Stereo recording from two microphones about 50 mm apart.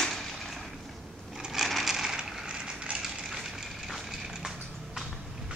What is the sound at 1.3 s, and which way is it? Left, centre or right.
Sewing machine, centre.